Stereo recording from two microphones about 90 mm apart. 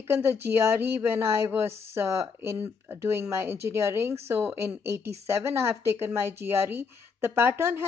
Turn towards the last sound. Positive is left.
turn(degrees=-30)  # may be behind; listen again after turning